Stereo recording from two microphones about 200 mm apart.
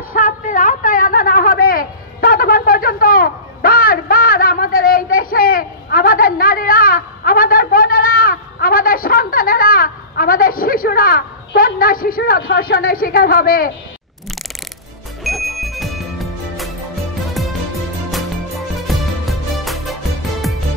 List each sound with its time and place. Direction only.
0.1 s a sound: 45° left (ahead or behind)
15.2 s music: centre (ahead or behind)
18.8 s music: centre (ahead or behind)